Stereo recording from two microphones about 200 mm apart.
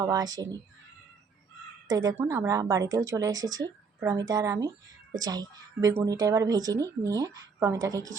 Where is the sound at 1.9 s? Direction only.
20° right (ahead or behind).